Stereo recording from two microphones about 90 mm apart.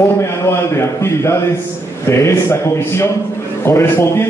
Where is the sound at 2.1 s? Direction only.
30° left (ahead or behind).